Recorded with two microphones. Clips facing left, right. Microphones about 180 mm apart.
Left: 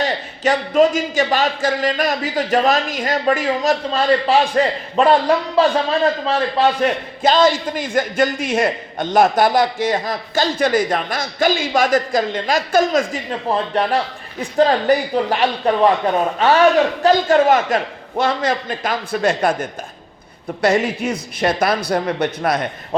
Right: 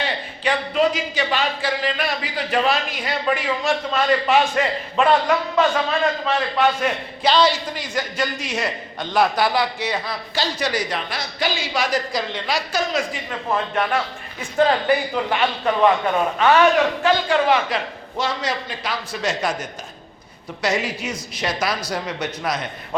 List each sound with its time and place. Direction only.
0.0 s a man's voice: 45° left (ahead or behind)
7.2 s a man's voice: 45° left (ahead or behind)
13.5 s a man's voice: 35° left (ahead or behind); by 22.6 s 55° left (ahead or behind)